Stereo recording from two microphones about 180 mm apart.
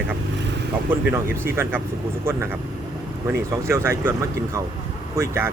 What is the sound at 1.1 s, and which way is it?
Speech, 15° right (ahead or behind).